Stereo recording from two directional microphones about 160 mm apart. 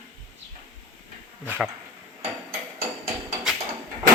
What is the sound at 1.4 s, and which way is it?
Speech, 10° right (ahead or behind).